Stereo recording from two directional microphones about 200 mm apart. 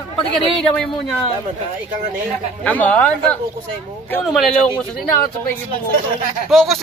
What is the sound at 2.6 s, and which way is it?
Speech, 5° left (ahead or behind).